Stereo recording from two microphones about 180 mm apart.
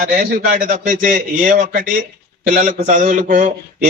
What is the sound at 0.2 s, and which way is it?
A man's voice, 50° right (ahead or behind).